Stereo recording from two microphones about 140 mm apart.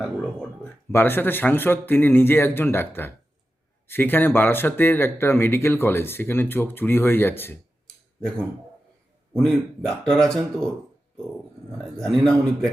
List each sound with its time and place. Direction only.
0.6 s speech: 15° left (ahead or behind)
9.3 s speech: 5° left (ahead or behind)
11.9 s speech: 5° left (ahead or behind)